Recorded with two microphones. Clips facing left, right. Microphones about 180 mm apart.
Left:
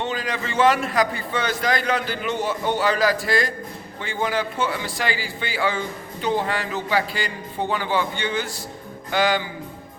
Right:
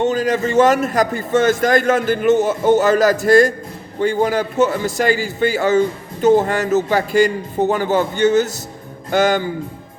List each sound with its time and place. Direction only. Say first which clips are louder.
0.0 s a man's voice: right 10 dB; 45° right (ahead or behind)